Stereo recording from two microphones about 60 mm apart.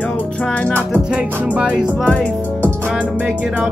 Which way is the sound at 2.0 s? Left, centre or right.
Left.